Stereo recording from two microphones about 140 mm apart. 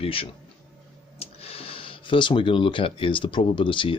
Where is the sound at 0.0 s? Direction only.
40° left (ahead or behind).